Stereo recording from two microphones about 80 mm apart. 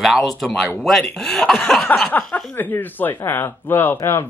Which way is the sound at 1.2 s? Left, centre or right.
Centre.